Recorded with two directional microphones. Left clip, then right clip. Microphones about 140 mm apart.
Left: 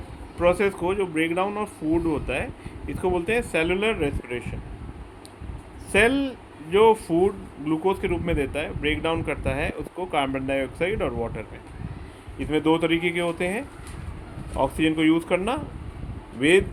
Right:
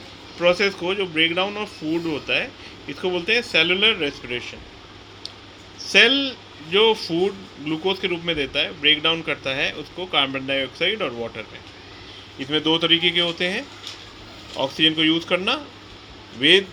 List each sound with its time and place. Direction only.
0.3 s speech: 15° left (ahead or behind)
1.5 s speech: 5° left (ahead or behind)
2.1 s speech: 15° left (ahead or behind)
5.9 s speech: 15° left (ahead or behind)